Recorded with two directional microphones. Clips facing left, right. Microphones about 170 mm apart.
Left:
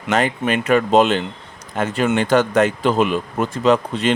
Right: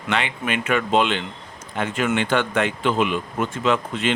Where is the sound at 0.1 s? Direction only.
40° left (ahead or behind).